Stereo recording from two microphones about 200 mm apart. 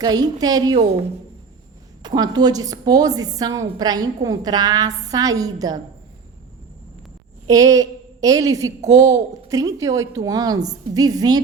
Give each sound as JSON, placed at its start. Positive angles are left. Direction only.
{"t": 0.0, "sound": "a woman's voice", "side_deg": -20}
{"t": 2.0, "sound": "a woman's voice", "side_deg": -20}
{"t": 7.4, "sound": "a woman's voice", "side_deg": -15}